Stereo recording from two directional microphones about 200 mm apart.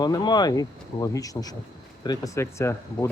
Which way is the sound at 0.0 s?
20° left (ahead or behind).